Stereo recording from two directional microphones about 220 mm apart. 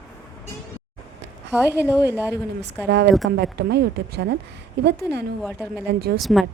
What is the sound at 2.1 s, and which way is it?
Speech, 10° right (ahead or behind).